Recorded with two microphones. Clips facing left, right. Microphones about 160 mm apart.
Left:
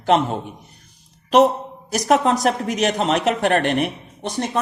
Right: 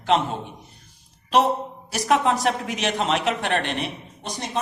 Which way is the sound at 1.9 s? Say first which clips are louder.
Left 3 dB; 40° left (ahead or behind).